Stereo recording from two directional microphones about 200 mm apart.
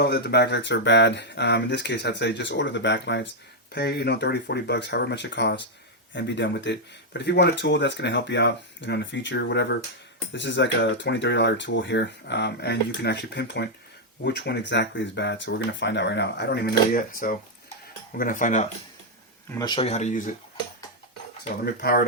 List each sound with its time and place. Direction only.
0.0 s speech: 55° left (ahead or behind); by 18.7 s 40° left (ahead or behind)
19.5 s speech: 20° left (ahead or behind); by 20.3 s 40° left (ahead or behind)
21.6 s speech: 50° left (ahead or behind)